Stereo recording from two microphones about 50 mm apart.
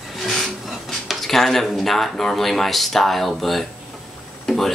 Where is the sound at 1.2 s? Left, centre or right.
Centre.